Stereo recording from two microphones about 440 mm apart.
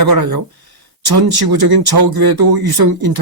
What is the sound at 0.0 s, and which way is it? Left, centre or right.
Speech, right.